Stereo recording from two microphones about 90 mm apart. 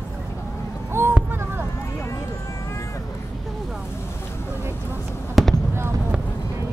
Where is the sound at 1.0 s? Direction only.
30° right (ahead or behind).